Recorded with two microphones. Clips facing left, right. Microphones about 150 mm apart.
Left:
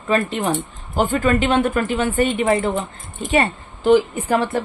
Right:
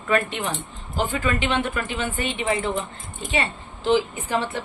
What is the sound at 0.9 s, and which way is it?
A woman's voice, 50° left (ahead or behind).